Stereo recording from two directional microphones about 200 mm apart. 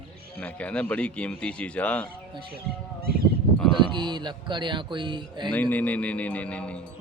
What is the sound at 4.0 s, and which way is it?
Speech, 25° right (ahead or behind).